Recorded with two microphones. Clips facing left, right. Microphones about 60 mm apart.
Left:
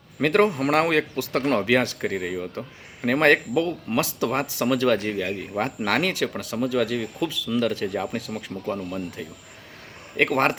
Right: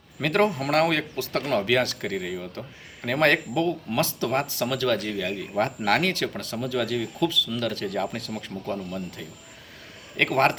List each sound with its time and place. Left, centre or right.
0.2 s speech: left
5.8 s speech: centre
10.2 s speech: centre